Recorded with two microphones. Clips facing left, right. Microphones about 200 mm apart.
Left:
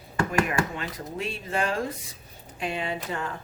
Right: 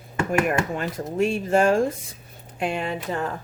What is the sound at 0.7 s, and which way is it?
Speech, 45° right (ahead or behind).